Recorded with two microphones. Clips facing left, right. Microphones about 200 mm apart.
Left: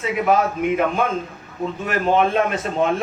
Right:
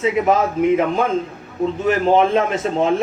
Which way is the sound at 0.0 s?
25° right (ahead or behind).